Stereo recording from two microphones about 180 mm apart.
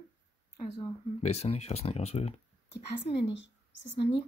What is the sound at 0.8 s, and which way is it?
Speech, 35° left (ahead or behind).